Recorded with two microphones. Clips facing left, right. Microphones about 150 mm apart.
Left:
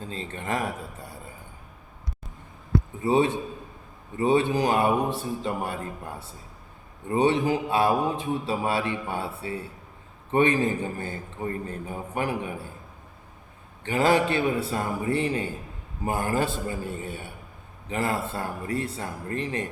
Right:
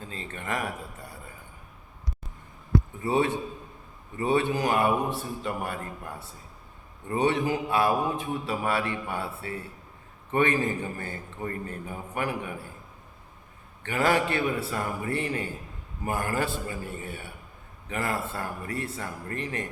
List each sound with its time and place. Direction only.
0.1 s speech: 30° left (ahead or behind)
3.0 s speech: 20° left (ahead or behind)
7.1 s speech: 25° left (ahead or behind)
13.8 s speech: 30° left (ahead or behind)